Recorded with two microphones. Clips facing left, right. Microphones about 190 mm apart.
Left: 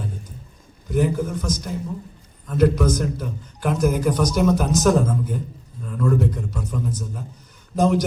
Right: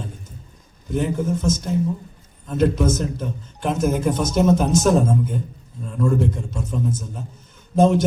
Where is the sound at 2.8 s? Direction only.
25° right (ahead or behind).